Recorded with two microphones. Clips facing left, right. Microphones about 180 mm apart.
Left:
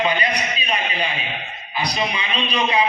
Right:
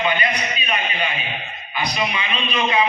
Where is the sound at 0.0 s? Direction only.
35° left (ahead or behind).